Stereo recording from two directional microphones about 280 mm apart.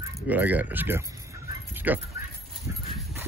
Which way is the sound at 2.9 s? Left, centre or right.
Centre.